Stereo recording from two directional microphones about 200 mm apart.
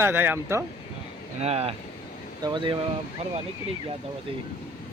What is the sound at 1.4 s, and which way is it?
Speech, 30° right (ahead or behind).